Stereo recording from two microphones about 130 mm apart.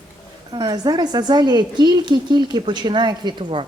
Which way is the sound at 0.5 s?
30° right (ahead or behind).